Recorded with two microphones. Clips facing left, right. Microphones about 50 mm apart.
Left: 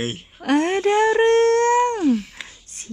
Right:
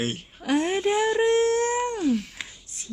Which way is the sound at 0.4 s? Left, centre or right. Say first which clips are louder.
Left 5 dB; left.